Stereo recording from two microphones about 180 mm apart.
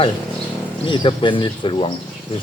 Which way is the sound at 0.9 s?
25° left (ahead or behind).